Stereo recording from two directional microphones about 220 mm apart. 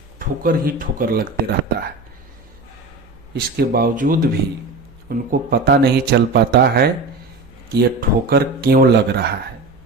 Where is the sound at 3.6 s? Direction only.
40° right (ahead or behind).